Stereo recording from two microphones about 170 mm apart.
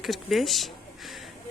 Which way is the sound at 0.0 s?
Centre (ahead or behind).